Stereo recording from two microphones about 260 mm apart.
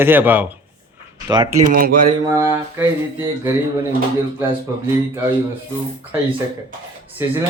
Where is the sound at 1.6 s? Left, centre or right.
Right.